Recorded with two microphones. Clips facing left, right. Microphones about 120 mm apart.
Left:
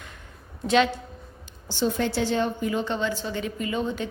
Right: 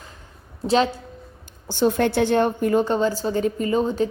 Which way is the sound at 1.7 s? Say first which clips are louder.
Right 6 dB; 55° right (ahead or behind).